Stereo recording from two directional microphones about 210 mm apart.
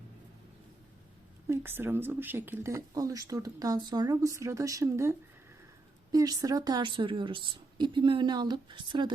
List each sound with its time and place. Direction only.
1.5 s speech: 10° right (ahead or behind)